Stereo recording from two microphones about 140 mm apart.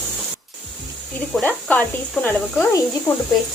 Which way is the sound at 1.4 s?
10° left (ahead or behind).